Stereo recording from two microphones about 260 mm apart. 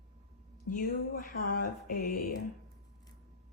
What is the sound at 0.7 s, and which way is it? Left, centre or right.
Mantra, left.